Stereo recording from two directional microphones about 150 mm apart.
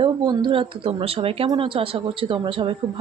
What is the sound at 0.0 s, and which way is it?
A woman's voice, 35° right (ahead or behind).